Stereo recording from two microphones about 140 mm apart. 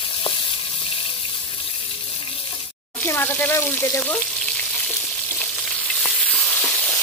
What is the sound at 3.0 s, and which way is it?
Speech, 15° left (ahead or behind).